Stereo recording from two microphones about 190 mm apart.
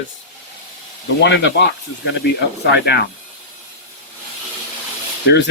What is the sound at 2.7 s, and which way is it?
Speech, 60° left (ahead or behind).